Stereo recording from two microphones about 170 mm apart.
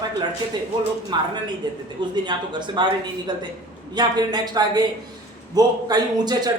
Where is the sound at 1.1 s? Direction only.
25° right (ahead or behind).